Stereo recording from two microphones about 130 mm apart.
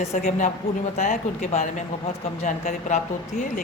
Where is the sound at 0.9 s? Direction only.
65° left (ahead or behind).